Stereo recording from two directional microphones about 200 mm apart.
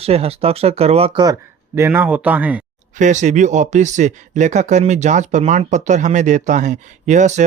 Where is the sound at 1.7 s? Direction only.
10° right (ahead or behind).